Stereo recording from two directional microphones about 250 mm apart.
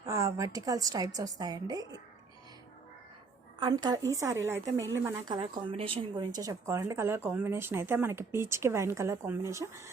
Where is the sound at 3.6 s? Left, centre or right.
Centre.